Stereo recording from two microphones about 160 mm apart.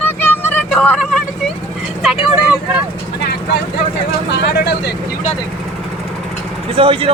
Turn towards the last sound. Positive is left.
turn(degrees=-35)  # may be behind; listen again after turning